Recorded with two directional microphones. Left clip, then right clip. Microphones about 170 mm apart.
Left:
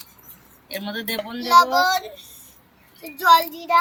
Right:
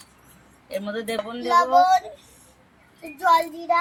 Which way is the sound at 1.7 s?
5° left (ahead or behind).